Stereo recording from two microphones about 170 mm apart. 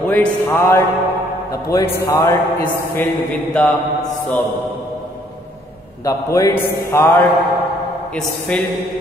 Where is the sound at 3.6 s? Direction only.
5° left (ahead or behind).